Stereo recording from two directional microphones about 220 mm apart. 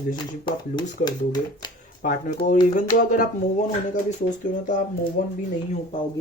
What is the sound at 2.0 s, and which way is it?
Speech, 35° left (ahead or behind).